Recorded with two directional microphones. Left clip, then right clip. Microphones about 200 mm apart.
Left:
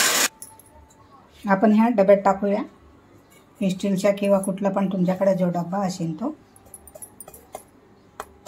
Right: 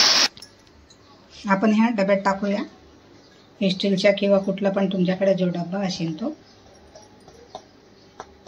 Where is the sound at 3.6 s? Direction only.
40° left (ahead or behind).